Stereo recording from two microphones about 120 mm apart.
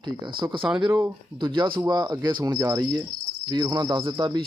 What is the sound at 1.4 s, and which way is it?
Speech, 40° right (ahead or behind).